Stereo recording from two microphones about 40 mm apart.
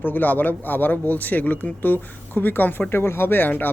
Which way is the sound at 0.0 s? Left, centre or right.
Left.